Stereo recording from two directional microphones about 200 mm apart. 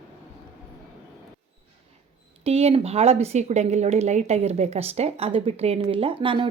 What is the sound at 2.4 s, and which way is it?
A woman's voice, 30° right (ahead or behind).